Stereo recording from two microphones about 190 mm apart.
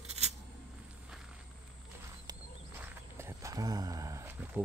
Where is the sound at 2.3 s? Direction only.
15° right (ahead or behind).